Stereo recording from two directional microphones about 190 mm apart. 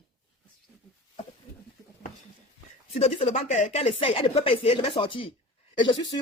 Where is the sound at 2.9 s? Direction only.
30° left (ahead or behind).